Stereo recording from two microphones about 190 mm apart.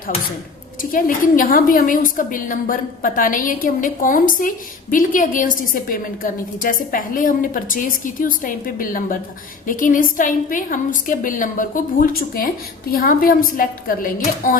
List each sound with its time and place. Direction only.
0.8 s a woman's voice: 45° left (ahead or behind)